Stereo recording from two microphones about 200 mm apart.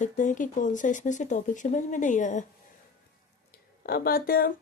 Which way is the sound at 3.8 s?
50° left (ahead or behind).